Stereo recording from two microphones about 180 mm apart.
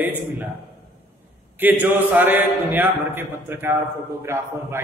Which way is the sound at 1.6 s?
10° right (ahead or behind).